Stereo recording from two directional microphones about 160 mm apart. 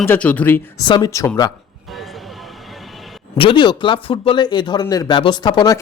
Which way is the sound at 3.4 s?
30° left (ahead or behind).